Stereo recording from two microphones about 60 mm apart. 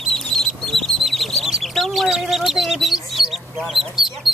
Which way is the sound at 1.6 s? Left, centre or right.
Centre.